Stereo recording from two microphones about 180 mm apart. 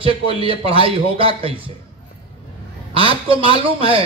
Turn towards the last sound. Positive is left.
turn(degrees=-30)  # may be behind; listen again after turning